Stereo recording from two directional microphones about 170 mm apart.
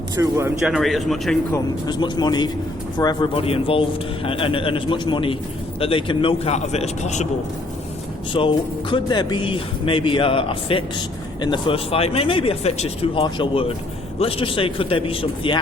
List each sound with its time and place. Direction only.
0.2 s speech: 15° right (ahead or behind)
0.6 s a man's voice: centre (ahead or behind)
1.5 s speech: 25° left (ahead or behind); by 7.3 s 40° left (ahead or behind)
8.3 s speech: 30° left (ahead or behind)